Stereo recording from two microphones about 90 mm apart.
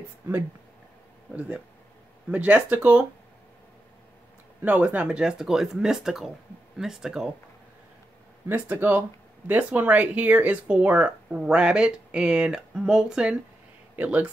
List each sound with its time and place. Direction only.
1.3 s speech: 15° right (ahead or behind)
4.6 s speech: 20° right (ahead or behind)
8.5 s speech: 25° right (ahead or behind)